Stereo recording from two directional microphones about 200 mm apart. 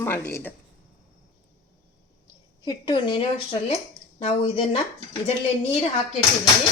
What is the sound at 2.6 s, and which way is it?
Speech, 25° left (ahead or behind).